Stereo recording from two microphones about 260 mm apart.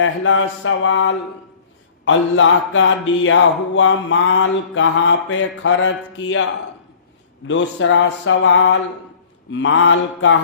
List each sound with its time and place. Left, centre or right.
0.0 s mantra: left
7.4 s mantra: left